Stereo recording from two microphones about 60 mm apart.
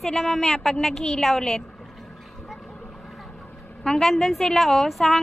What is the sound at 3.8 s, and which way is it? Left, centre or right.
A woman's voice, centre.